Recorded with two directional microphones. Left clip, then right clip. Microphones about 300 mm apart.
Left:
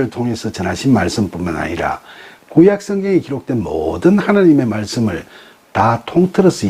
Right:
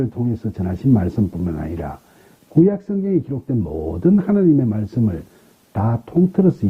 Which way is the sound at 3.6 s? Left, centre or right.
Left.